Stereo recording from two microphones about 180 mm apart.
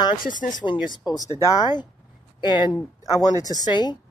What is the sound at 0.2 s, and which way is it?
Speech, 45° left (ahead or behind).